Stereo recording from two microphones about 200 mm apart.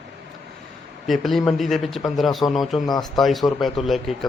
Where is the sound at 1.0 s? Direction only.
Centre (ahead or behind).